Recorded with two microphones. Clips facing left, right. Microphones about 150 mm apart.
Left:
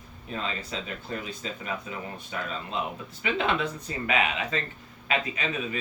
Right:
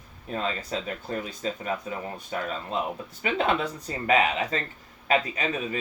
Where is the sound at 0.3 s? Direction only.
45° right (ahead or behind).